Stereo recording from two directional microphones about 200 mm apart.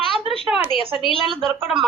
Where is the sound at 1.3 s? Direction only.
25° right (ahead or behind).